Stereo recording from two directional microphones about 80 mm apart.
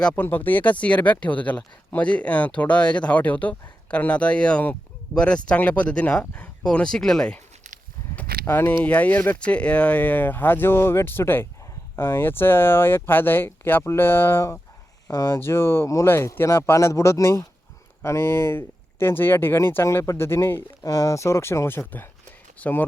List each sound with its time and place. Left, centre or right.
0.0 s speech: centre
0.3 s speech: left
8.1 s speech: left
22.5 s speech: centre